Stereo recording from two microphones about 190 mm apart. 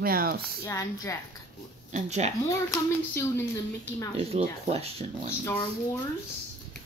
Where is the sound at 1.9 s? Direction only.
35° right (ahead or behind).